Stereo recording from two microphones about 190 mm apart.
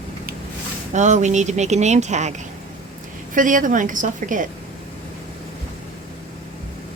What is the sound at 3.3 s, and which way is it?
A woman's voice, 45° right (ahead or behind).